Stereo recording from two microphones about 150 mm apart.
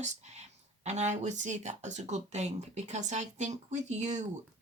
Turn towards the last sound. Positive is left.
turn(degrees=-50)  # may be behind; listen again after turning